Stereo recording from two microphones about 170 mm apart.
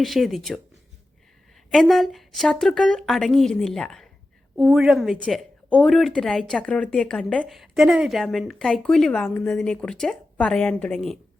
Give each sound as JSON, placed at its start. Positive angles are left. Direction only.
{"t": 0.0, "sound": "speech", "side_deg": 0}
{"t": 1.7, "sound": "speech", "side_deg": 0}